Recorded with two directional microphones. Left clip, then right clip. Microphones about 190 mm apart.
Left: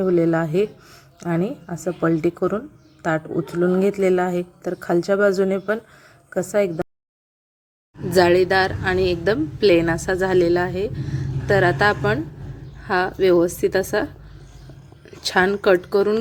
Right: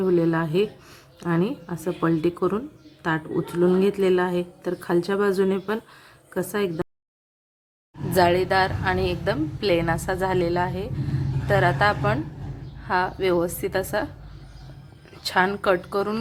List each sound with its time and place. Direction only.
0.0 s a woman's voice: 10° left (ahead or behind)
8.1 s a woman's voice: 20° left (ahead or behind)
15.2 s a woman's voice: 20° left (ahead or behind)